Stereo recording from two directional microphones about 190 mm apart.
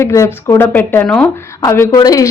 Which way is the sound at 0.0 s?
15° left (ahead or behind).